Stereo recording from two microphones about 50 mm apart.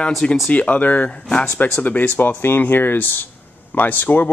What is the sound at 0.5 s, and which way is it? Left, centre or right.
A man's voice, left.